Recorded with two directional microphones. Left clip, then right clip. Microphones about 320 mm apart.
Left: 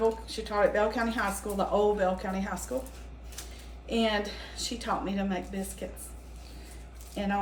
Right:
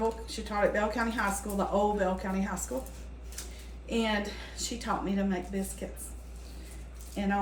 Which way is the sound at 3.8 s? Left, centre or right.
Centre.